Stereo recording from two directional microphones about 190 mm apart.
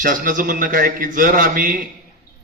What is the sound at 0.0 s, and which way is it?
A man's voice, 45° right (ahead or behind).